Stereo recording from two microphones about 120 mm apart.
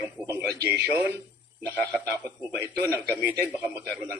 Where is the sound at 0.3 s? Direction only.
20° right (ahead or behind).